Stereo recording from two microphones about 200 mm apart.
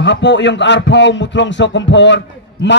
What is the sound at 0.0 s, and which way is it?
A man's voice, 60° left (ahead or behind).